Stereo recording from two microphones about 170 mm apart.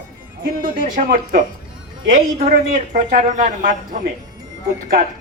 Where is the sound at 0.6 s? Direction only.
50° right (ahead or behind).